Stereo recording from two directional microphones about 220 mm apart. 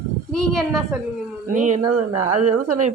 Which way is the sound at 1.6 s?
35° right (ahead or behind).